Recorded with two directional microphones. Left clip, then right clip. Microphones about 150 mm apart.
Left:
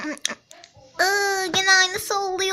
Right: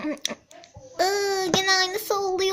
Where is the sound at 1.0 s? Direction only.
15° right (ahead or behind).